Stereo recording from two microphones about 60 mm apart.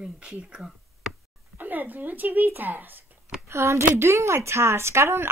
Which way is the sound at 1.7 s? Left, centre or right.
Right.